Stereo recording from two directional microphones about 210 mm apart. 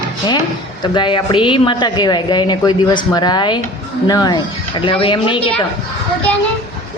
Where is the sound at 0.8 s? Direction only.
20° left (ahead or behind).